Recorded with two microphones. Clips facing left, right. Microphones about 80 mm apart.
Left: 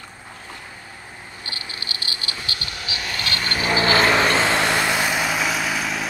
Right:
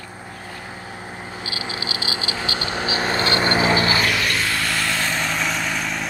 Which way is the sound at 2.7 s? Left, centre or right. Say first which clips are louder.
Right 10 dB; right.